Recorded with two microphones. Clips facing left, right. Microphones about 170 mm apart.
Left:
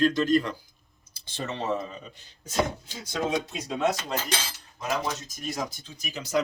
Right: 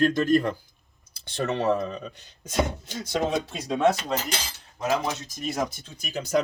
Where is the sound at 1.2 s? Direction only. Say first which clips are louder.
Right 6 dB; 65° right (ahead or behind).